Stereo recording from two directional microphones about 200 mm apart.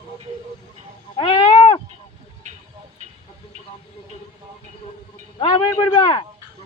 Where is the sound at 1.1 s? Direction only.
25° left (ahead or behind).